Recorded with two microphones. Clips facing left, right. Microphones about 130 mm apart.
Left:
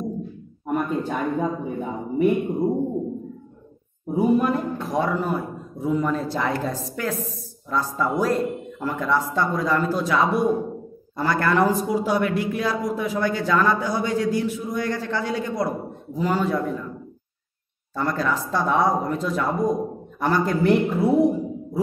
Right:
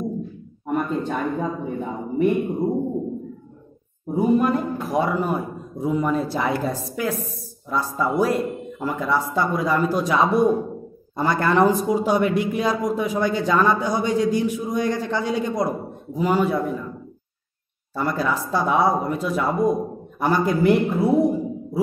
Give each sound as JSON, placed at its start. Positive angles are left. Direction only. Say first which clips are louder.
{"t": 0.7, "sound": "speech", "louder": "right 1 dB", "side_deg": 5}
{"t": 4.1, "sound": "a woman's voice", "louder": "right 1 dB", "side_deg": 5}
{"t": 4.7, "sound": "a man's voice", "louder": "right 2 dB", "side_deg": -10}
{"t": 17.9, "sound": "speech", "louder": "right 1 dB", "side_deg": -10}
{"t": 20.7, "sound": "a woman's voice", "louder": "even", "side_deg": 0}